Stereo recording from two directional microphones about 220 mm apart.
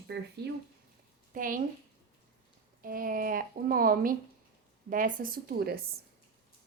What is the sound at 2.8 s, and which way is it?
Speech, 40° right (ahead or behind).